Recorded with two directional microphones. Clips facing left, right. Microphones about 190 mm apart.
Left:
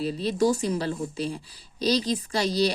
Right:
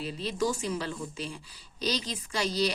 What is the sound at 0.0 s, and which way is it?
A woman's voice, 40° left (ahead or behind).